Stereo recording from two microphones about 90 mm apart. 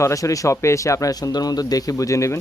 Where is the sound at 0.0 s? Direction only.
35° left (ahead or behind).